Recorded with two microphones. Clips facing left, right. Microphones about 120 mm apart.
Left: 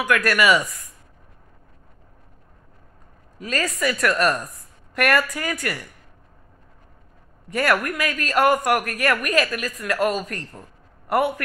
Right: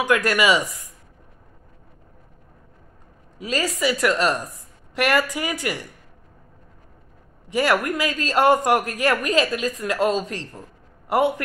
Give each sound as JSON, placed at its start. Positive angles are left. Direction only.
{"t": 0.0, "sound": "a woman's voice", "side_deg": -20}
{"t": 3.4, "sound": "a woman's voice", "side_deg": -15}
{"t": 7.5, "sound": "a woman's voice", "side_deg": -20}